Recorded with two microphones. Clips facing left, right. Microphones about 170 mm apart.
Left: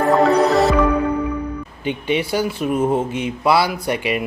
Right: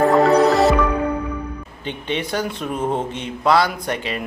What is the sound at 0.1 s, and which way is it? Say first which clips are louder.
Music: even; centre (ahead or behind).